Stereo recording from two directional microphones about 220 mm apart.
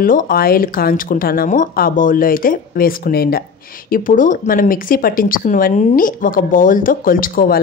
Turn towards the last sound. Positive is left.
turn(degrees=40)  # may be behind; listen again after turning